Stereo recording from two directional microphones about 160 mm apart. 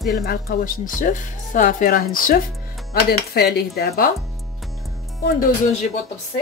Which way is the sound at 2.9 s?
80° left.